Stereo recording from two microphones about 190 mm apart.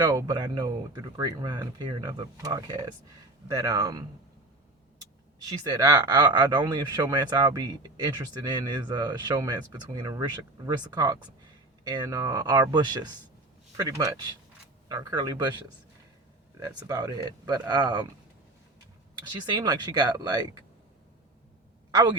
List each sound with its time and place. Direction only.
0.0 s speech: 20° right (ahead or behind)
5.5 s speech: 20° right (ahead or behind)
19.3 s speech: 20° right (ahead or behind)